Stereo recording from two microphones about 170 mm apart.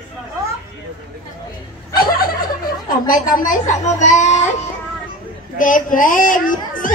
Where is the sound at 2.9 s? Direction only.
55° left (ahead or behind).